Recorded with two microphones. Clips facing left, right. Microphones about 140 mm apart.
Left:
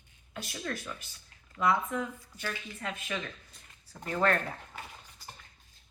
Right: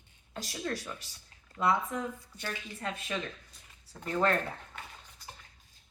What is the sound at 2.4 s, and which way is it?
Speech, 30° right (ahead or behind).